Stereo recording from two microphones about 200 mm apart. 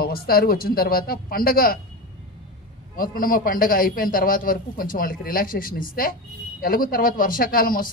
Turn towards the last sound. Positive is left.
turn(degrees=45)  # may be behind; listen again after turning